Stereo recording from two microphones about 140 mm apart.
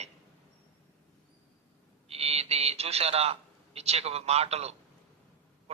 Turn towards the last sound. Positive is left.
turn(degrees=-50)  # may be behind; listen again after turning